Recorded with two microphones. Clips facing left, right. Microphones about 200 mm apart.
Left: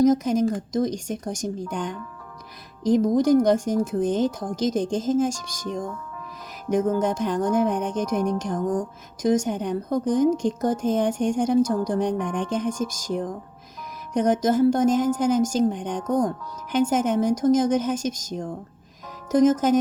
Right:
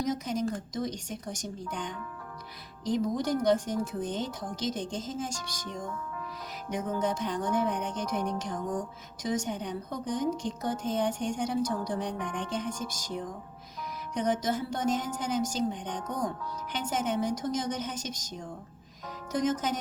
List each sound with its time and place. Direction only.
0.0 s speech: 45° left (ahead or behind)
6.7 s speech: 45° left (ahead or behind)
14.1 s speech: 45° left (ahead or behind)